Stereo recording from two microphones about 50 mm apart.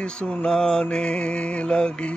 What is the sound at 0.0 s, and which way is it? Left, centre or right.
Mantra, left.